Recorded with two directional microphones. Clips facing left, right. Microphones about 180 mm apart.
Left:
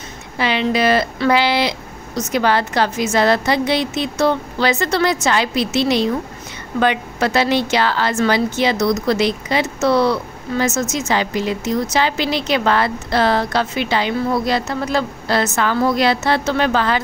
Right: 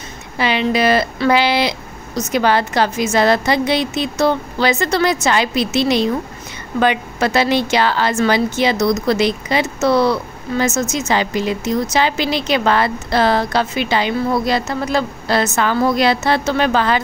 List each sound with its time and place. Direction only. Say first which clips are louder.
0.4 s a woman's voice: right 1 dB; 10° right (ahead or behind)